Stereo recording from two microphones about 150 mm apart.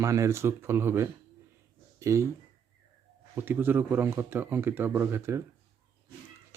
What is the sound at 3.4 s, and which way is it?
Speech, 15° right (ahead or behind).